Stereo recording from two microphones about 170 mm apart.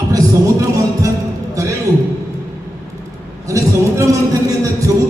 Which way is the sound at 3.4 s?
20° right (ahead or behind).